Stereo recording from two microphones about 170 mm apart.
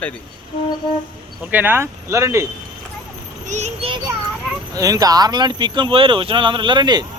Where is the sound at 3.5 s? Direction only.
40° right (ahead or behind).